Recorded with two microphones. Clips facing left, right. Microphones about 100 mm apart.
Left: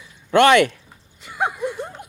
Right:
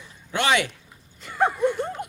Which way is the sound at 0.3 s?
60° left (ahead or behind).